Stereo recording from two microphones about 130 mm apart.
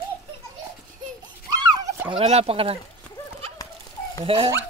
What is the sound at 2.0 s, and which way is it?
Speech, 50° right (ahead or behind).